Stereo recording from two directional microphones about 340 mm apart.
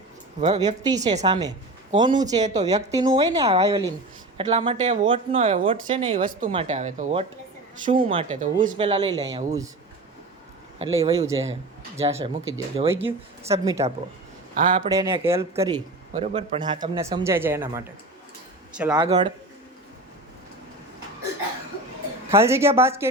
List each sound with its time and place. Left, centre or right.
0.3 s a woman's voice: centre
10.9 s a woman's voice: centre
14.5 s speech: right
14.8 s a woman's voice: centre
22.3 s a woman's voice: centre